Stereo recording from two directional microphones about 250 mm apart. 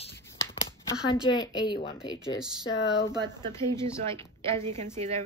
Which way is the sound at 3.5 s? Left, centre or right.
Centre.